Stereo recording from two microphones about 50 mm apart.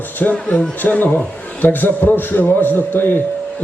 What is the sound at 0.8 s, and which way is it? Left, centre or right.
A man's voice, left.